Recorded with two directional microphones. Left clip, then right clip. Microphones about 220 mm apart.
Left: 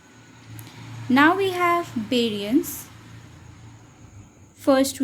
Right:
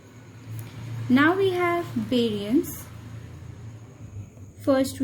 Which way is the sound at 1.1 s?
25° left (ahead or behind).